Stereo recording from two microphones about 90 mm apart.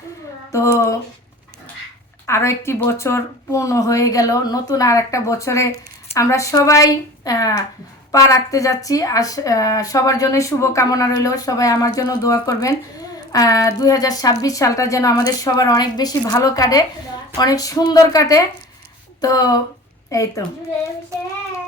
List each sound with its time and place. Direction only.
0.5 s speech: 35° left (ahead or behind)
2.2 s a woman's voice: 30° left (ahead or behind)